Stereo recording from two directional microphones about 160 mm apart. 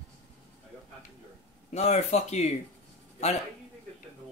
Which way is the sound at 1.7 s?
45° left (ahead or behind).